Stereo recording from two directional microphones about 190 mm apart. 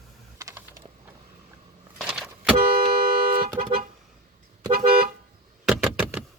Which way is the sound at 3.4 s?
55° right (ahead or behind).